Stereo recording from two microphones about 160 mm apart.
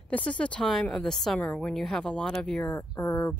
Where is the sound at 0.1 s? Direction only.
10° left (ahead or behind).